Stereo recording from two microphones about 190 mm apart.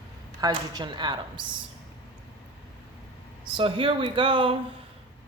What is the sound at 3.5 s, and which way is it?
Speech, 25° right (ahead or behind).